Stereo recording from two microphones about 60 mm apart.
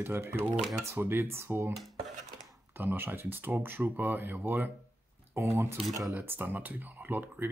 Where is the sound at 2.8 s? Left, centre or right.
Right.